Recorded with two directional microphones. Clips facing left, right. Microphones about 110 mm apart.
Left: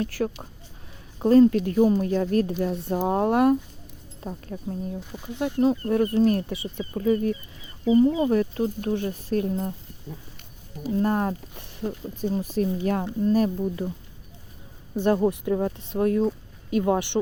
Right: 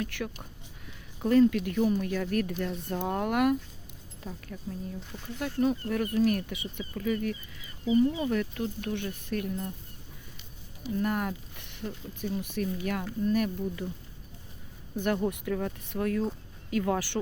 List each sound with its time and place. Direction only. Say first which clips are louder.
0.0 s speech: left 8 dB; 35° left (ahead or behind)
2.6 s speech: left 7 dB; centre (ahead or behind)
3.1 s speech: left 6 dB; 30° left (ahead or behind)
5.1 s speech: left 6 dB; 20° left (ahead or behind); by 9.6 s 35° left (ahead or behind)
10.8 s speech: left 6 dB; 35° left (ahead or behind)
14.9 s speech: left 7 dB; 30° left (ahead or behind)